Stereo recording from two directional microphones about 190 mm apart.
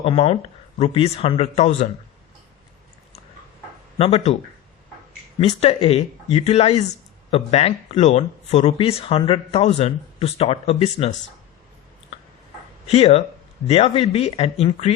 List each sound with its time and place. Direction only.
0.0 s speech: 30° left (ahead or behind)
3.9 s speech: 30° left (ahead or behind)
5.4 s speech: 30° left (ahead or behind)
12.9 s speech: 30° left (ahead or behind)